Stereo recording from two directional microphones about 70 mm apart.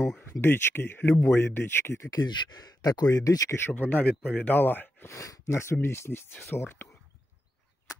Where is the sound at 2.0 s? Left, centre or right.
Left.